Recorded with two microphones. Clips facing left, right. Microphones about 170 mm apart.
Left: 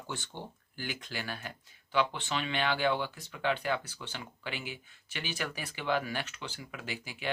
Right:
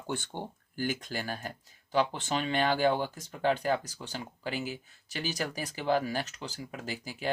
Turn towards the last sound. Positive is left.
turn(degrees=-40)  # may be behind; listen again after turning